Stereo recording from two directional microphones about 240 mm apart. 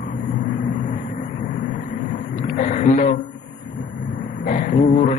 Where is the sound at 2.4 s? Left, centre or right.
Left.